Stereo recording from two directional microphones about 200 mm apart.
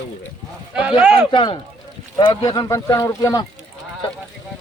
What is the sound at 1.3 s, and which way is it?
Speech, 20° left (ahead or behind).